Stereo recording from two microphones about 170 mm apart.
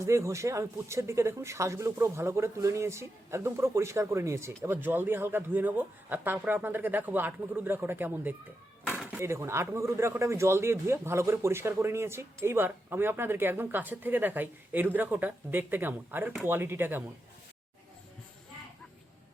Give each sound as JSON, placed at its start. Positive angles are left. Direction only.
{"t": 0.0, "sound": "speech", "side_deg": -15}
{"t": 8.9, "sound": "dishes", "side_deg": 0}
{"t": 9.1, "sound": "speech", "side_deg": -15}